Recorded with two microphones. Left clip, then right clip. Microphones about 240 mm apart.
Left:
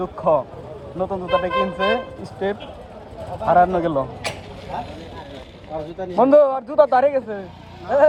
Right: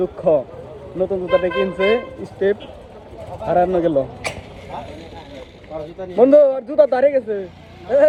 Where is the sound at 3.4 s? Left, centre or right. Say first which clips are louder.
Left 2 dB; left.